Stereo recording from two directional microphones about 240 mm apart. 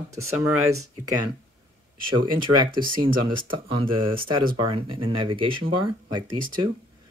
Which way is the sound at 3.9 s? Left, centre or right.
Right.